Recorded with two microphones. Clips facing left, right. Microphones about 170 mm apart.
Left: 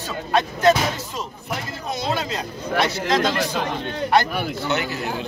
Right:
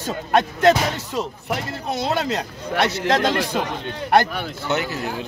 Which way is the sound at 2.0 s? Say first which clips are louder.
Right 3 dB; 65° right (ahead or behind).